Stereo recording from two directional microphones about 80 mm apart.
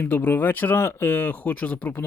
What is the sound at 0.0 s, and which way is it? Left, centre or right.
Speech, left.